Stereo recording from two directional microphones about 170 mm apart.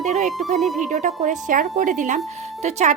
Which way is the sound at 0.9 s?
45° right (ahead or behind).